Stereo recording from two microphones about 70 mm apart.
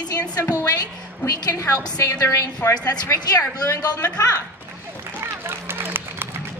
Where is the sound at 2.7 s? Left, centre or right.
Left.